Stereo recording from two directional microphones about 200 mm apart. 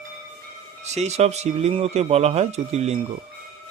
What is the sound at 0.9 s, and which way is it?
Speech, 35° right (ahead or behind).